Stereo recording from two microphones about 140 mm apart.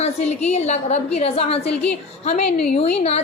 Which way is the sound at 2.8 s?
45° left (ahead or behind).